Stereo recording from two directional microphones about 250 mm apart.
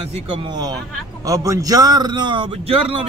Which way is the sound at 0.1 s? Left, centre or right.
Right.